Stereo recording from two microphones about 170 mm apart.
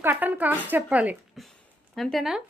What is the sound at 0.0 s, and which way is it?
A woman's voice, 10° right (ahead or behind).